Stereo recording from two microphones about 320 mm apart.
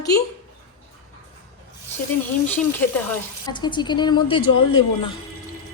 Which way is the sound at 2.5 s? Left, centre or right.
Centre.